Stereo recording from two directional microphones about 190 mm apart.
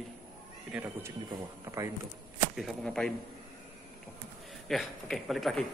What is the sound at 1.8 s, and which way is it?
Speech, 15° right (ahead or behind).